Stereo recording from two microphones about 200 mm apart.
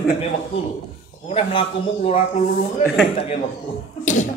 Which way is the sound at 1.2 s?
30° left (ahead or behind).